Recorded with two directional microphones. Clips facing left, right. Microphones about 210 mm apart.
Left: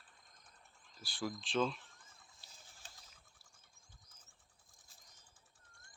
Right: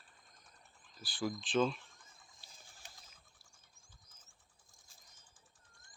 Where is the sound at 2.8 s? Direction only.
15° right (ahead or behind).